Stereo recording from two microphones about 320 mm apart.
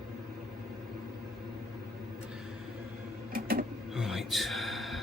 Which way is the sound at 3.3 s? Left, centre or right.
Right.